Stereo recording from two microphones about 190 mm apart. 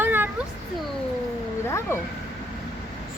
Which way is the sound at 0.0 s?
10° right (ahead or behind).